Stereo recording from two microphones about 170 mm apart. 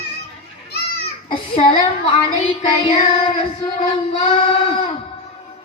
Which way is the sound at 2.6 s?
35° left (ahead or behind).